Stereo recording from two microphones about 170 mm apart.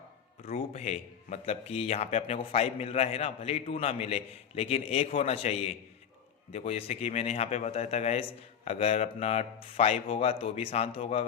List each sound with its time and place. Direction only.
0.4 s speech: 35° left (ahead or behind)